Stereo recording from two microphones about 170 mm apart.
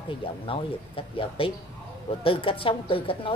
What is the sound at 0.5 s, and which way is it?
Speech, 30° left (ahead or behind).